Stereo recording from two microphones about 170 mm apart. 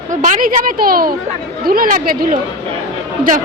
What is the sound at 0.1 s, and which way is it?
A woman's voice, 45° right (ahead or behind).